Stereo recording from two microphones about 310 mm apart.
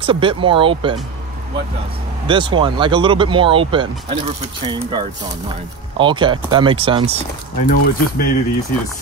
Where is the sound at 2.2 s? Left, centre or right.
Centre.